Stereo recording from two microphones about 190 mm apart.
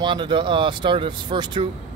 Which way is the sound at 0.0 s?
25° right (ahead or behind).